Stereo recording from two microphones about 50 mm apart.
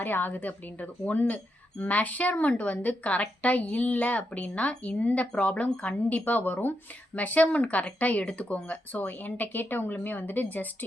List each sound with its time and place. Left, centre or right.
0.0 s a woman's voice: left